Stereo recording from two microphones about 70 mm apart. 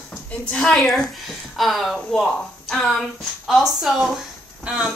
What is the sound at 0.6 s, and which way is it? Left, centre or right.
A woman's voice, centre.